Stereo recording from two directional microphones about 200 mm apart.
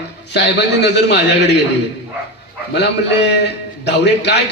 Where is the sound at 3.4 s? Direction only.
55° left (ahead or behind).